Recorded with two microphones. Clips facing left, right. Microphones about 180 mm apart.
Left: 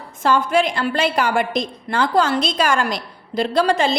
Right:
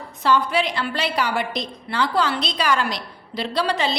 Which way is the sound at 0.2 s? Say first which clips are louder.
Left 3 dB; 45° left (ahead or behind).